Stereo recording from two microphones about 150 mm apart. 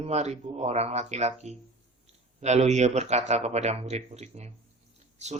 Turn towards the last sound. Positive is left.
turn(degrees=-50)  # may be behind; listen again after turning